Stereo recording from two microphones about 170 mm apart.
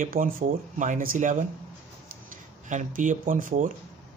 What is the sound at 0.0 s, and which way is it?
Speech, 55° right (ahead or behind).